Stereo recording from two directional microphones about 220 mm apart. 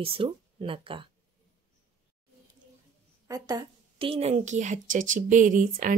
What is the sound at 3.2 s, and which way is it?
A woman's voice, 15° right (ahead or behind).